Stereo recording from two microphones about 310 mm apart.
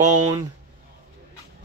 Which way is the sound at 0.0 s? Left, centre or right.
Right.